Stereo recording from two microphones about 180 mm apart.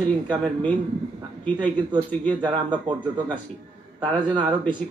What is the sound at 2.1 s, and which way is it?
Speech, 10° left (ahead or behind).